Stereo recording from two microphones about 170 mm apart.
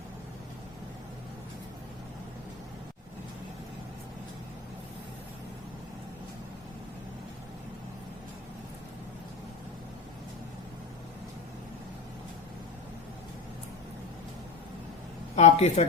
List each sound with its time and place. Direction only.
15.4 s speech: 40° left (ahead or behind)